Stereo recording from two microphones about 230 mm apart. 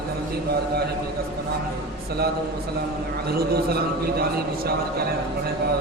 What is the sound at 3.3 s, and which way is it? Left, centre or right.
Speech, right.